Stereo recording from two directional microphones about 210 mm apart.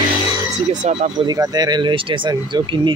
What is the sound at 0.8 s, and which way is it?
Speech, 35° right (ahead or behind).